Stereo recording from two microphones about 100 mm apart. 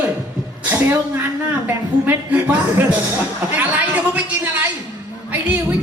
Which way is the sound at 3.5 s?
15° right (ahead or behind).